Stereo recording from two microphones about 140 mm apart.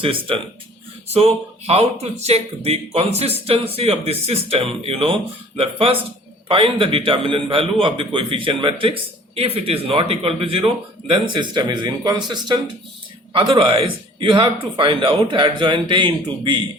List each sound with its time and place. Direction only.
0.0 s a man's voice: 40° right (ahead or behind)